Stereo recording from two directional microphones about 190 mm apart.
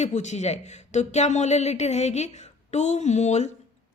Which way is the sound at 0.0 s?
40° left (ahead or behind).